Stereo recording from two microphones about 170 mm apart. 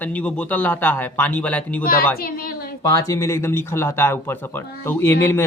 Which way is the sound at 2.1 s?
60° left (ahead or behind).